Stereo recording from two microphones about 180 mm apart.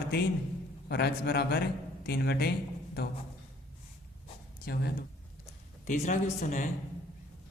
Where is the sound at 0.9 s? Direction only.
65° left (ahead or behind).